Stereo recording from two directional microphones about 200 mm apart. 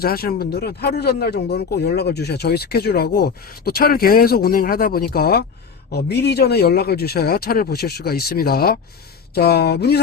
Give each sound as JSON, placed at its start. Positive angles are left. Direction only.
{"t": 0.0, "sound": "speech", "side_deg": 50}